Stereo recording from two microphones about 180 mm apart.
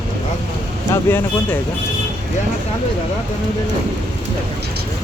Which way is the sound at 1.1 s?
10° left (ahead or behind).